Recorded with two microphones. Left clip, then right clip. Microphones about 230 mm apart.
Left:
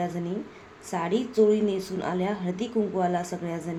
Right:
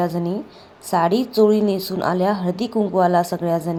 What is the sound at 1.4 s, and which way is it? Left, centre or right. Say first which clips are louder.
A woman's voice: right 6 dB; right.